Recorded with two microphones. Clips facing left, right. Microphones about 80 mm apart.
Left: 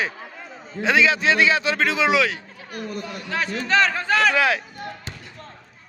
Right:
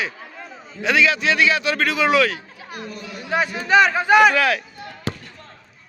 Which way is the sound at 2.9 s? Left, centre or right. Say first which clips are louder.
Left 3 dB; left.